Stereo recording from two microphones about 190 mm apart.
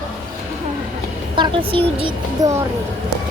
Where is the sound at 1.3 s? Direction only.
25° right (ahead or behind).